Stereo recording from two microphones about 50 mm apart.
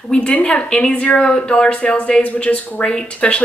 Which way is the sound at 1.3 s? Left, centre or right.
Centre.